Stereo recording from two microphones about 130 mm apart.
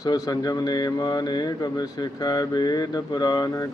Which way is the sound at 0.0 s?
30° left (ahead or behind).